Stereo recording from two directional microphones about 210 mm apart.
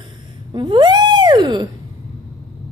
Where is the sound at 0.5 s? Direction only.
25° right (ahead or behind).